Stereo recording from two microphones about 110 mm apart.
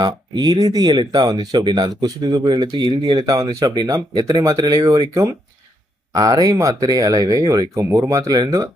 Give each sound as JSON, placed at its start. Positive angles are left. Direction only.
{"t": 0.0, "sound": "speech", "side_deg": -40}